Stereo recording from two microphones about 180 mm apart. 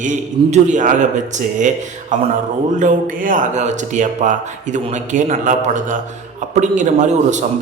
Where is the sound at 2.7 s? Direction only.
45° right (ahead or behind).